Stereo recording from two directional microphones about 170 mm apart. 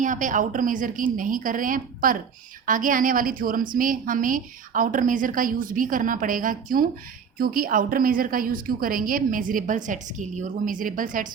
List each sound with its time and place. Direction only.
0.0 s a woman's voice: 50° right (ahead or behind)